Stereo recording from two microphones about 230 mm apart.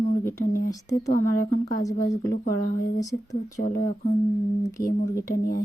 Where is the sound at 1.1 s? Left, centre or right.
Left.